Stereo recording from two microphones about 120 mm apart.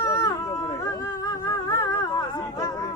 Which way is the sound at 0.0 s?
25° left (ahead or behind).